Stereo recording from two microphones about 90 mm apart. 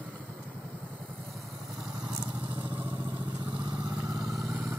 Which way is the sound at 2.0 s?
45° right (ahead or behind).